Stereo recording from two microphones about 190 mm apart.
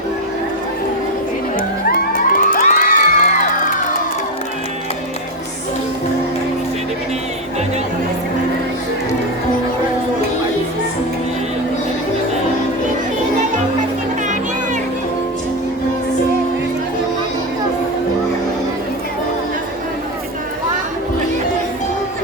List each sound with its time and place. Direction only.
1.5 s music: 45° left (ahead or behind)